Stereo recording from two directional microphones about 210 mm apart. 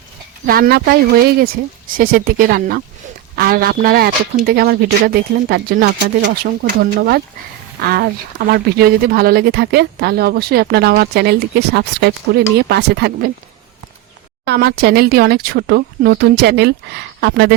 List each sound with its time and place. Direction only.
0.4 s speech: 45° right (ahead or behind)
7.8 s speech: 50° right (ahead or behind)
14.4 s speech: 50° right (ahead or behind)